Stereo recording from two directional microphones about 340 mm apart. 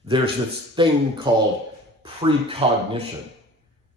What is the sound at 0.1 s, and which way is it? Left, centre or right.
Speech, centre.